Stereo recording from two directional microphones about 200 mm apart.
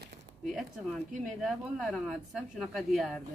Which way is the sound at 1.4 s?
Centre (ahead or behind).